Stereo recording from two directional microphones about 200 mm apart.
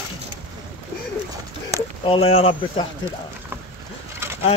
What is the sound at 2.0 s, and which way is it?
Speech, 30° left (ahead or behind).